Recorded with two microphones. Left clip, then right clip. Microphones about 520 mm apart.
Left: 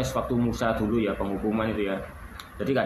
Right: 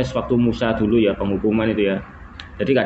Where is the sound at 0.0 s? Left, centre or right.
Left.